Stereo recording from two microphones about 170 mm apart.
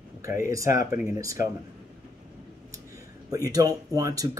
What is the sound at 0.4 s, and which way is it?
Speech, 20° right (ahead or behind).